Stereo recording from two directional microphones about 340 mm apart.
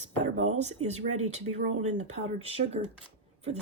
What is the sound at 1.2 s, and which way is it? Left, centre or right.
A woman's voice, centre.